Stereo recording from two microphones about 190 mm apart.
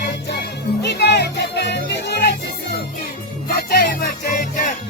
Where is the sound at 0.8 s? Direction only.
60° left (ahead or behind).